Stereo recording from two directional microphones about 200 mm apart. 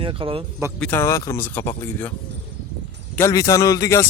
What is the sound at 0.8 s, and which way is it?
A man's voice, 10° left (ahead or behind).